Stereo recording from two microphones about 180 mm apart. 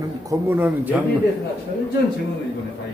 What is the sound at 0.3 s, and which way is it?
Speech, 10° right (ahead or behind).